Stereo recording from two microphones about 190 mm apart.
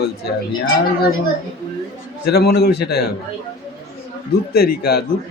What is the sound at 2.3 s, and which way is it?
Speech, 55° left (ahead or behind).